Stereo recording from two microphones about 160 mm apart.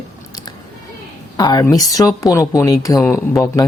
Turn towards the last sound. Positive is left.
turn(degrees=25)  # may be behind; listen again after turning